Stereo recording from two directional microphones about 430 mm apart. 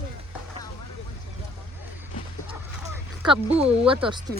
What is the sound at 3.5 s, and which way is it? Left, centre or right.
Speech, centre.